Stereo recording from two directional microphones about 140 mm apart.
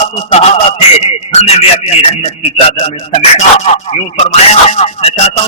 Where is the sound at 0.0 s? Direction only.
50° left (ahead or behind).